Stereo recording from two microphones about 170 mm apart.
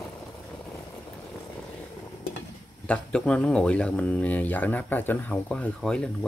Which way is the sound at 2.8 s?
5° left (ahead or behind).